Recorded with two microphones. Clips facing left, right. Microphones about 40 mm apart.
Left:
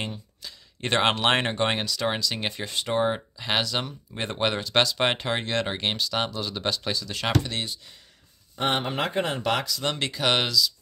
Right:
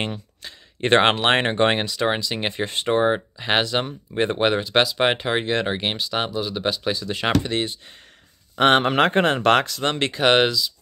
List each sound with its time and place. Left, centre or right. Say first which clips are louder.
0.4 s a sound: right 9 dB; right
1.1 s speech: right 4 dB; right
2.9 s speech: right 5 dB; right
7.0 s speech: right 4 dB; right
8.5 s speech: right 9 dB; right